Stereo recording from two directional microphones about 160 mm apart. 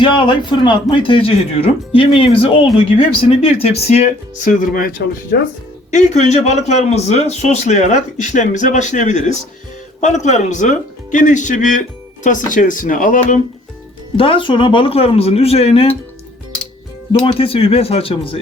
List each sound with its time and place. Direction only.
0.0 s speech: 30° left (ahead or behind); by 4.9 s 60° left (ahead or behind)
5.9 s a man's voice: 45° left (ahead or behind)
14.2 s speech: 35° left (ahead or behind)
17.2 s speech: 35° left (ahead or behind)